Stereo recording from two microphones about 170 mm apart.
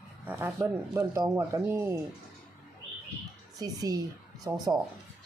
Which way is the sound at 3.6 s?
20° right (ahead or behind).